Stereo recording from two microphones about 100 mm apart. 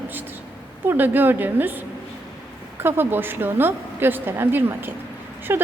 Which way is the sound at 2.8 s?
20° right (ahead or behind).